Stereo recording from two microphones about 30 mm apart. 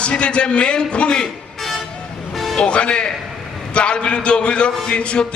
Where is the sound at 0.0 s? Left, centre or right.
Left.